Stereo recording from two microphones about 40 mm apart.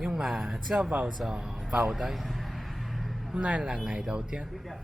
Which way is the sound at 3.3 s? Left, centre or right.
Right.